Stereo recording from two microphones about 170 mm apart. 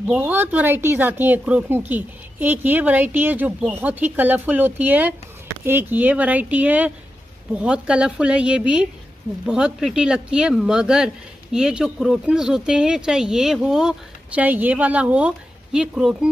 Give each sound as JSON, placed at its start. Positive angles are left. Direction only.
{"t": 0.0, "sound": "speech", "side_deg": -10}